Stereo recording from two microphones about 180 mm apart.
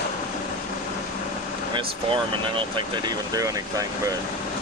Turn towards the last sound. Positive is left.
turn(degrees=-20)  # may be behind; listen again after turning